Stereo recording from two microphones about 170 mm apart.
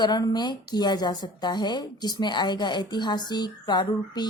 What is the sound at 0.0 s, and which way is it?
A woman's voice, 25° left (ahead or behind).